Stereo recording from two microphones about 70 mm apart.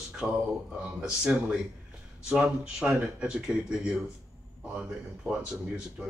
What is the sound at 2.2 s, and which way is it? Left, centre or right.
Speech, centre.